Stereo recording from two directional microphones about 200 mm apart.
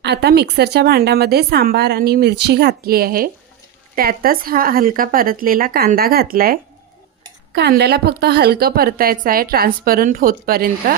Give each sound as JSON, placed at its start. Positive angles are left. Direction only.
{"t": 0.0, "sound": "a woman's voice", "side_deg": -55}